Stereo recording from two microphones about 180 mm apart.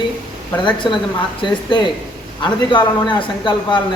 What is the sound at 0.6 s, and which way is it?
A man's voice, 25° left (ahead or behind).